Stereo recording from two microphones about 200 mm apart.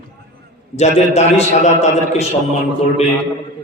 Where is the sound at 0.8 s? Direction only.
35° left (ahead or behind).